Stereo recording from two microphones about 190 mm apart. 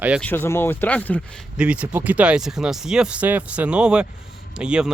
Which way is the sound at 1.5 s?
5° right (ahead or behind).